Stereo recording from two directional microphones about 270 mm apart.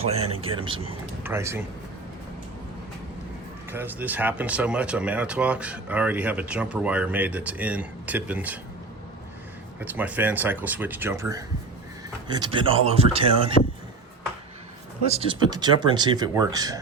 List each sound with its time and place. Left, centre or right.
0.0 s speech: right
3.7 s speech: centre
9.8 s speech: centre
13.6 s a man's voice: left
15.1 s speech: centre